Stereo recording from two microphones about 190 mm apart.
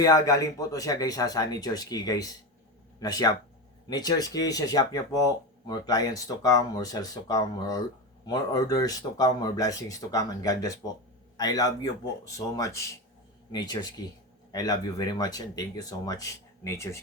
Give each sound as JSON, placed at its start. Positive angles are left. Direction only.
{"t": 0.0, "sound": "speech", "side_deg": 20}
{"t": 13.5, "sound": "speech", "side_deg": 20}